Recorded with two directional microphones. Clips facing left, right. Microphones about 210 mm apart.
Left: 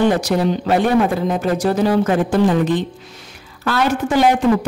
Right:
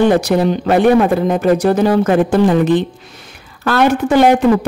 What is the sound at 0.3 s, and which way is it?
A woman's voice, 60° right (ahead or behind).